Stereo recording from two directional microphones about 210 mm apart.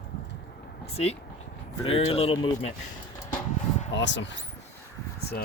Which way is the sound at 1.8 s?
30° left (ahead or behind).